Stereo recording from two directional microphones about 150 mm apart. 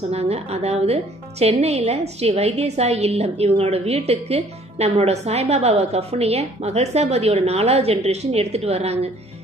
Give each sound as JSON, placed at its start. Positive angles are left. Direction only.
{"t": 0.1, "sound": "a woman's voice", "side_deg": -45}